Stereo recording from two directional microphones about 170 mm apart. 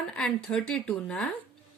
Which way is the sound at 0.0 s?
5° left (ahead or behind).